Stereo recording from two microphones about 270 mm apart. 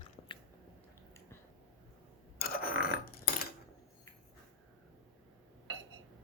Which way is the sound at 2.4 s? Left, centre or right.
Left.